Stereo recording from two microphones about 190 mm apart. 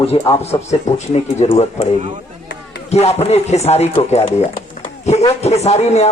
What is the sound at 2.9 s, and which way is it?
A man's voice, 35° left (ahead or behind).